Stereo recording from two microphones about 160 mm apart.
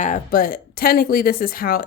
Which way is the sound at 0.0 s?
55° left (ahead or behind).